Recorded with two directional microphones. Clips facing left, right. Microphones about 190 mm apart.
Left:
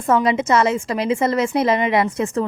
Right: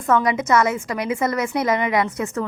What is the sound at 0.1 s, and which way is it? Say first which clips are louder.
A woman's voice: left 1 dB; 25° left (ahead or behind).